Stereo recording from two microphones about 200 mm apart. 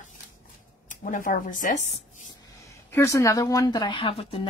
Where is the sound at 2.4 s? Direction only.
15° left (ahead or behind).